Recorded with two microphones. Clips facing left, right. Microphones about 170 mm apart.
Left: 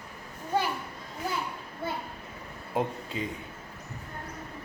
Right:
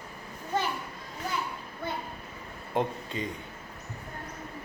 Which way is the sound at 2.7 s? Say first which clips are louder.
Right 1 dB; 5° left (ahead or behind).